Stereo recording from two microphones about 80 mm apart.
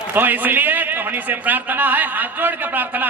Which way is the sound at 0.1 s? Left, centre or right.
Right.